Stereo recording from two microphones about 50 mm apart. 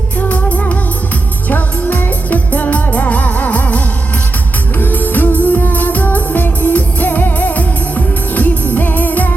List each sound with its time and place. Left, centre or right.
0.2 s music: left